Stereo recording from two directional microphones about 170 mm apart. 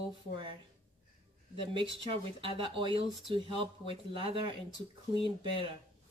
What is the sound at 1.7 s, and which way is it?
Speech, 30° right (ahead or behind).